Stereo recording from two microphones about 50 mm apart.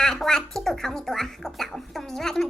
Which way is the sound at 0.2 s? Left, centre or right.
Centre.